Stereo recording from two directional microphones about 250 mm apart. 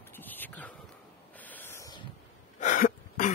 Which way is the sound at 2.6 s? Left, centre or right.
Left.